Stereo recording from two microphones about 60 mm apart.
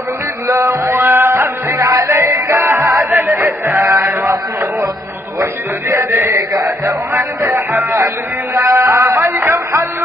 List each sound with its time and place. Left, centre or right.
0.5 s music: right
5.4 s a sound: right
6.6 s music: right
8.5 s music: right